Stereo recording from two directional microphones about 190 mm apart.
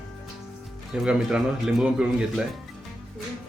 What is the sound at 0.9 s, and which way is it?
A man's voice, 5° right (ahead or behind).